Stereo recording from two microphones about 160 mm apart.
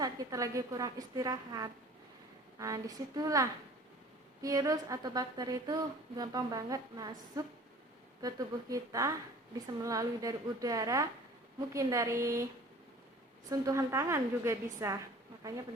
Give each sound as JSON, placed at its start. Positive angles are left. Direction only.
{"t": 0.0, "sound": "speech", "side_deg": -20}
{"t": 13.5, "sound": "speech", "side_deg": -20}